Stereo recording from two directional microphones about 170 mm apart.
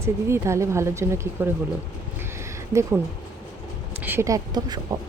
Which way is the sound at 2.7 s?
15° right (ahead or behind).